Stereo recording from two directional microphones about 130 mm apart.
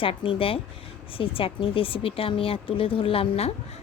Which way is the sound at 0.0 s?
45° left (ahead or behind).